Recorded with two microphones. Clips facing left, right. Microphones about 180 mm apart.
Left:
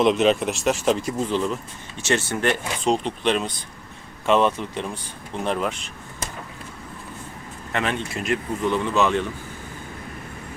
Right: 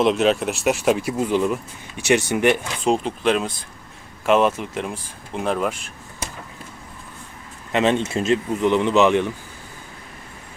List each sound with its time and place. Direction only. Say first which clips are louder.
0.0 s speech: even; centre (ahead or behind)
2.9 s speech: right 2 dB; 5° right (ahead or behind)
7.7 s speech: right 7 dB; 20° right (ahead or behind)